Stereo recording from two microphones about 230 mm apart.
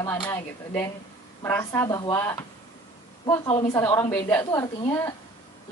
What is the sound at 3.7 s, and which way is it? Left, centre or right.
Speech, centre.